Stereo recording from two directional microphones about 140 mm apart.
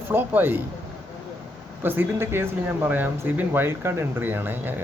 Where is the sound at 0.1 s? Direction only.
15° right (ahead or behind).